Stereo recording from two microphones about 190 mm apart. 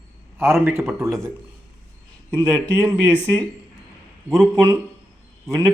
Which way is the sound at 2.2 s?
15° right (ahead or behind).